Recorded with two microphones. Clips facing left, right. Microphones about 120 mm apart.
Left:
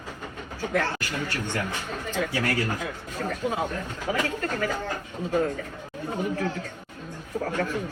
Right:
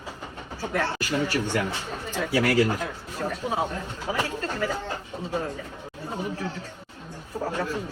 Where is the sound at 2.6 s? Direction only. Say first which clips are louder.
Right 5 dB; 15° right (ahead or behind).